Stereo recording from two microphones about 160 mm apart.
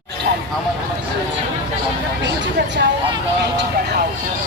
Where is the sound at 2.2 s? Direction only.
90° right.